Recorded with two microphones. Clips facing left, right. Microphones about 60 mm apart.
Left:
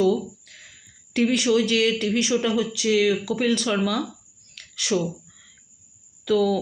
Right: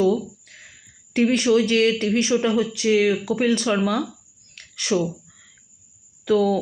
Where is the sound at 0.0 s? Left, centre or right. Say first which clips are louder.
Right 1 dB; right.